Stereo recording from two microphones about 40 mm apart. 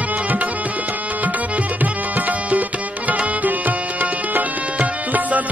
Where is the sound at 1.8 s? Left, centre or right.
Right.